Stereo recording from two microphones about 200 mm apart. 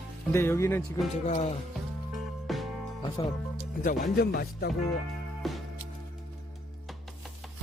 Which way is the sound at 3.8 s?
50° left (ahead or behind).